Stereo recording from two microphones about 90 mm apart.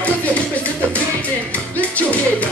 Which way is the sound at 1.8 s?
15° left (ahead or behind).